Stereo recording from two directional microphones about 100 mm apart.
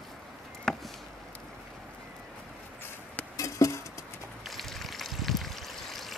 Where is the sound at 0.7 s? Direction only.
5° left (ahead or behind).